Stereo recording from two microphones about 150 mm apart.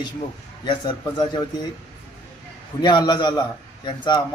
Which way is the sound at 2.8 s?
30° left (ahead or behind).